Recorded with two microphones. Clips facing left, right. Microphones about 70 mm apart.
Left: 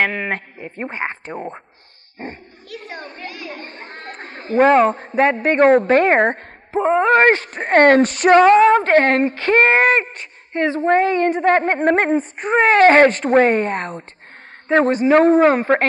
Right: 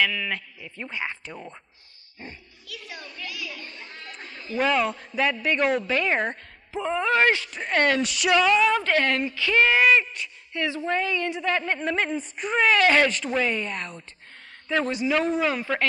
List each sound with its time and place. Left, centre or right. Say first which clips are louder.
0.0 s a man's voice: left 5 dB; left